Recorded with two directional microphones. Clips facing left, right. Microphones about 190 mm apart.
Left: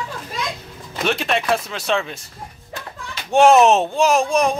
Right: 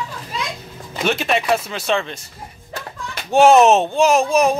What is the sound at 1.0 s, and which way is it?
Speech, centre (ahead or behind).